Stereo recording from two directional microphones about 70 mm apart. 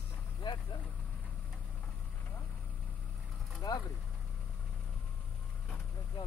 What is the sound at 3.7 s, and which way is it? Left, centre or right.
Speech, left.